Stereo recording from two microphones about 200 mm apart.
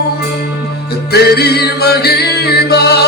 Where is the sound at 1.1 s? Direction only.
55° left (ahead or behind).